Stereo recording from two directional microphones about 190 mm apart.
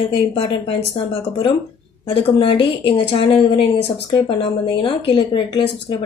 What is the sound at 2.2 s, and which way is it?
A woman's voice, 30° left (ahead or behind).